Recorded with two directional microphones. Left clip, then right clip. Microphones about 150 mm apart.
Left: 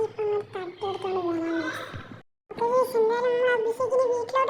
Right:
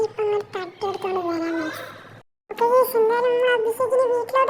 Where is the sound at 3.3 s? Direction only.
Centre (ahead or behind).